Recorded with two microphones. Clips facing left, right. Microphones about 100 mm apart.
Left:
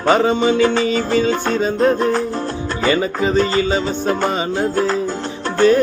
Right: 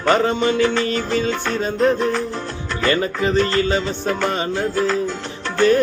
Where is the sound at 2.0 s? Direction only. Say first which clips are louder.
Left 3 dB; 40° left (ahead or behind).